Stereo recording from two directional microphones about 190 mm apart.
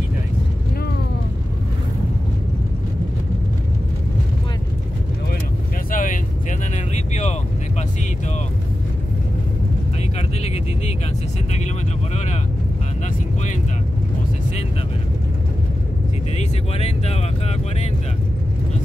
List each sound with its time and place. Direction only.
5.9 s vehicle: 45° left (ahead or behind)
10.1 s vehicle: 35° left (ahead or behind)
16.3 s vehicle: 35° left (ahead or behind)